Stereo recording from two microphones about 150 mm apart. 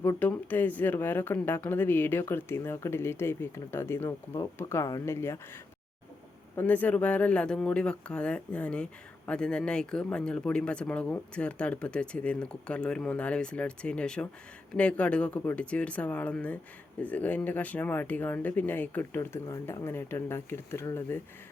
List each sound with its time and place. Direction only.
0.0 s speech: 15° left (ahead or behind)
6.6 s speech: 10° left (ahead or behind)